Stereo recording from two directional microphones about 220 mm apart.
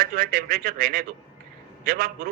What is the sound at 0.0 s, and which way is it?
Speech, 40° right (ahead or behind).